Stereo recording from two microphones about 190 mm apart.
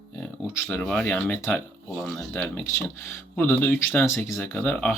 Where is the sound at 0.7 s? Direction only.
5° left (ahead or behind).